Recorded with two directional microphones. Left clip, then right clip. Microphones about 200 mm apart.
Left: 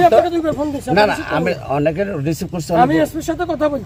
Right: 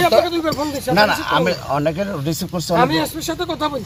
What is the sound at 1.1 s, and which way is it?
Speech, 15° left (ahead or behind).